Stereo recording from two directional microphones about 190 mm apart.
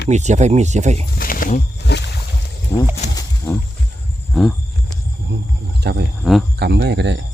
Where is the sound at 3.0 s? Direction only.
35° left (ahead or behind).